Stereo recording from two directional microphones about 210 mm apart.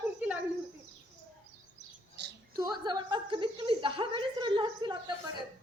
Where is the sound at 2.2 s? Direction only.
55° right (ahead or behind).